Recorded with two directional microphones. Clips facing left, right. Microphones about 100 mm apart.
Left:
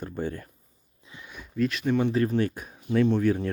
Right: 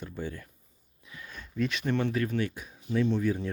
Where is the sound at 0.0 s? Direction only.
50° left (ahead or behind).